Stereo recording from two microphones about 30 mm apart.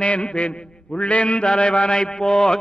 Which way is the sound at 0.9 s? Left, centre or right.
Left.